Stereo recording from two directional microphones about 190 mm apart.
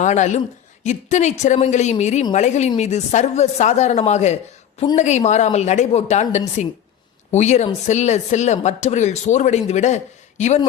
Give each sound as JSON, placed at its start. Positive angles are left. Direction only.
{"t": 0.0, "sound": "speech", "side_deg": 40}